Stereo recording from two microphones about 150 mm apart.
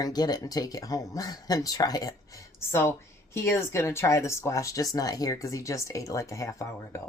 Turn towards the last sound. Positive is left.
turn(degrees=20)  # may be behind; listen again after turning